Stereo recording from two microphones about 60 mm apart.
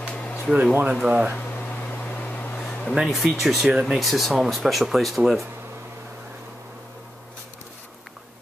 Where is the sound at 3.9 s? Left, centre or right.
Centre.